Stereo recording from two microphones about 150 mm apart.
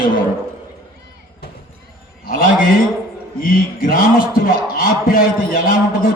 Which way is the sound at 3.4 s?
75° left (ahead or behind).